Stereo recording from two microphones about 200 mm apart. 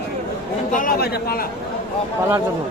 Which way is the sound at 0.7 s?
45° left (ahead or behind).